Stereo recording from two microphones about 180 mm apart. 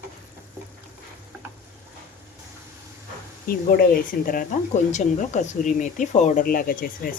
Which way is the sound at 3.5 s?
50° left (ahead or behind).